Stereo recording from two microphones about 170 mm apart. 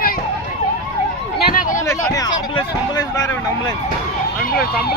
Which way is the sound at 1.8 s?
20° left (ahead or behind).